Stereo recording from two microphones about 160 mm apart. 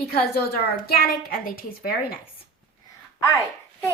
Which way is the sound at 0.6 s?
70° left (ahead or behind).